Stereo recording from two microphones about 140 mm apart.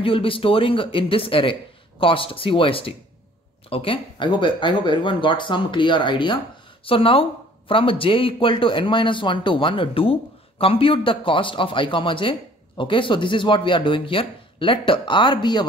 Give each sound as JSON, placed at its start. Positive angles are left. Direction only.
{"t": 0.0, "sound": "speech", "side_deg": 40}